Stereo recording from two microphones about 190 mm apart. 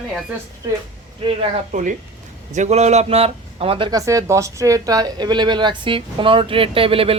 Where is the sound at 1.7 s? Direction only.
40° right (ahead or behind).